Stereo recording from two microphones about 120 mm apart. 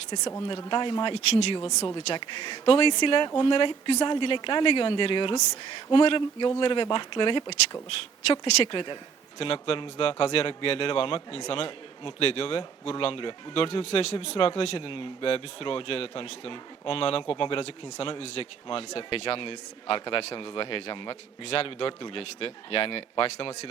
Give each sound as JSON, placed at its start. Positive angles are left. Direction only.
{"t": 0.7, "sound": "speech", "side_deg": 40}
{"t": 1.3, "sound": "speech", "side_deg": 60}
{"t": 1.8, "sound": "a man's voice", "side_deg": 35}